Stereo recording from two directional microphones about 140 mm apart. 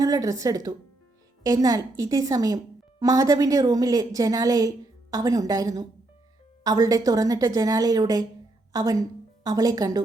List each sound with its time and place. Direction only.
0.0 s a woman's voice: 25° right (ahead or behind)